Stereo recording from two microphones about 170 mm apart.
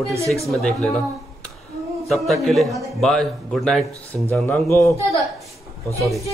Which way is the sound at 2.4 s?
Centre (ahead or behind).